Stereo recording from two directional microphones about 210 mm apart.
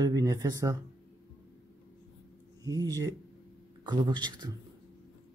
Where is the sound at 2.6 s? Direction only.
15° right (ahead or behind).